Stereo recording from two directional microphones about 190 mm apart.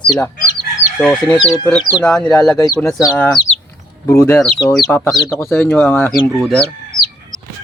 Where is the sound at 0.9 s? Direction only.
5° left (ahead or behind).